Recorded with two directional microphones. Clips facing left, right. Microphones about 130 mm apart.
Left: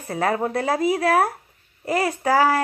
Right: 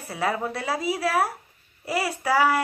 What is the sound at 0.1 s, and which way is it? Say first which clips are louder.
Speech: left 5 dB; 45° left (ahead or behind).